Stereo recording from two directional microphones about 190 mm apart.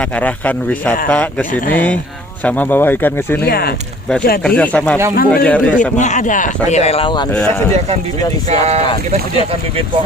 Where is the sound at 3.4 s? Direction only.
55° left (ahead or behind).